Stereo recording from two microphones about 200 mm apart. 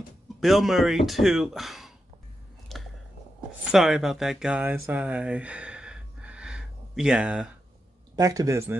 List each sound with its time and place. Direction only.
0.4 s speech: centre (ahead or behind)
2.7 s a sound: centre (ahead or behind)
3.7 s speech: 5° right (ahead or behind)
8.2 s speech: 15° right (ahead or behind)